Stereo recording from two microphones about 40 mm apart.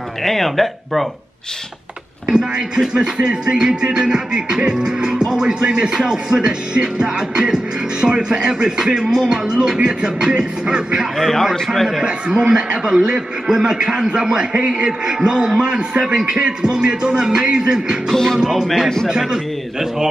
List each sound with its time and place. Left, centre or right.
0.2 s speech: centre
2.2 s a man's voice: centre
11.1 s speech: centre
12.0 s speech: centre
18.1 s music: centre
19.0 s a man's voice: centre